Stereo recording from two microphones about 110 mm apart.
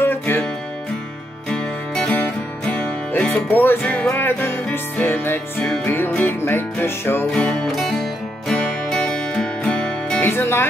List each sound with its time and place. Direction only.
0.0 s music: 20° left (ahead or behind)
1.5 s music: 10° left (ahead or behind)
7.2 s music: 5° left (ahead or behind)
10.2 s speech: 20° left (ahead or behind)